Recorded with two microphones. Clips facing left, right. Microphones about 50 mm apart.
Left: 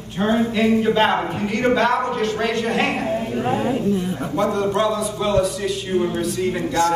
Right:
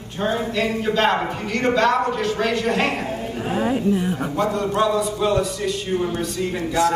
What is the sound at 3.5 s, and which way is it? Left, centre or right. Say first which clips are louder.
Speech: right 5 dB; centre.